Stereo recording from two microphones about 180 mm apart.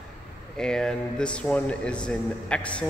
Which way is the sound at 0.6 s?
5° left (ahead or behind).